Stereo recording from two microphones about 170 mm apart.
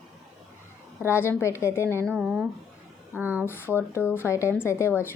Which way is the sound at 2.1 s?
10° right (ahead or behind).